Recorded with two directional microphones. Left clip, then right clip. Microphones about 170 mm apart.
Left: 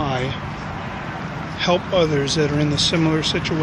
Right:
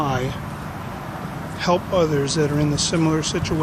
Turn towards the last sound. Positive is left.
turn(degrees=-5)  # may be behind; listen again after turning